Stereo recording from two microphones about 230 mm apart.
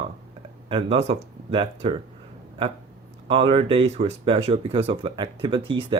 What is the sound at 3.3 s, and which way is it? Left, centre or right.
Speech, right.